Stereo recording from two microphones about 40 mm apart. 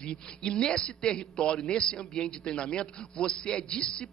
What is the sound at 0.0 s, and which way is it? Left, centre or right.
A man's voice, left.